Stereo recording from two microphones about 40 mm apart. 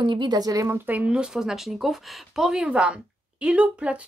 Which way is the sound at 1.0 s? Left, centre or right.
Centre.